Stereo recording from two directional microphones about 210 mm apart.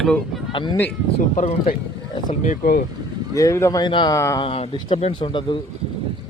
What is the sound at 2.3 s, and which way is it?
Speech, 35° left (ahead or behind).